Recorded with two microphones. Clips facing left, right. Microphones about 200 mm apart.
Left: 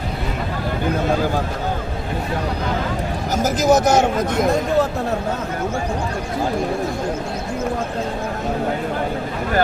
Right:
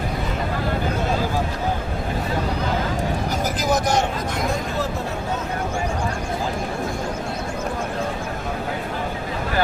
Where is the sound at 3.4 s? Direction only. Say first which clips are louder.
Left 8 dB; 45° left (ahead or behind).